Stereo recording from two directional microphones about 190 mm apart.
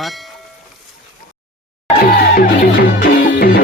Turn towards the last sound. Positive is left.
turn(degrees=50)  # may be behind; listen again after turning